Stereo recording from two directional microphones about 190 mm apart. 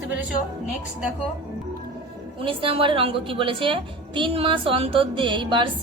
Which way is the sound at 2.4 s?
30° right (ahead or behind).